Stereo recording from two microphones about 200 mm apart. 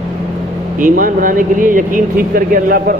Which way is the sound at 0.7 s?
45° right (ahead or behind).